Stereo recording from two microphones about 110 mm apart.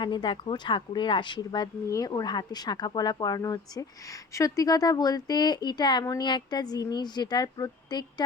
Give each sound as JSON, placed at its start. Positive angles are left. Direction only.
{"t": 0.0, "sound": "speech", "side_deg": 45}